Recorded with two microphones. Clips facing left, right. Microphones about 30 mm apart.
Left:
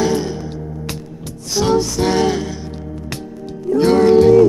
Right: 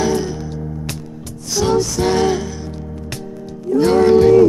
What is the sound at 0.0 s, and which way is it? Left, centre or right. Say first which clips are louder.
Music: even; centre.